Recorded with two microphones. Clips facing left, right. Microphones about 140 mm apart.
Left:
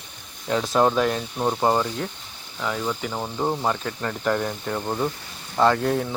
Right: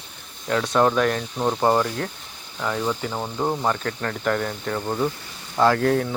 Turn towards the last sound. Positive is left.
turn(degrees=5)  # may be behind; listen again after turning